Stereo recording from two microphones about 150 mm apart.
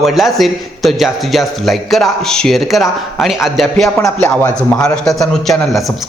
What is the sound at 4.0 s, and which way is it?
Speech, 15° left (ahead or behind).